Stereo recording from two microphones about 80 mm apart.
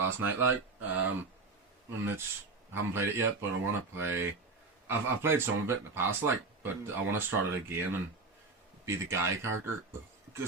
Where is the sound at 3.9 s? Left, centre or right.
Right.